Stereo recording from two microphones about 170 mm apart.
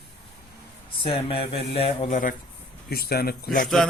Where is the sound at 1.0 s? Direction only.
30° left (ahead or behind).